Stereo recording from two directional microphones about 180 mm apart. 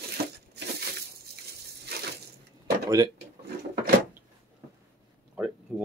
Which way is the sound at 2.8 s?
20° right (ahead or behind).